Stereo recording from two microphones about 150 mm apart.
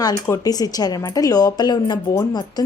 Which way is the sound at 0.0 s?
25° left (ahead or behind).